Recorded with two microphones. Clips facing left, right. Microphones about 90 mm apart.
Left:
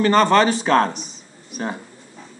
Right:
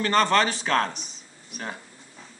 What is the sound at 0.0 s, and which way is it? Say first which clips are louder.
Speech: left 6 dB; 10° left (ahead or behind).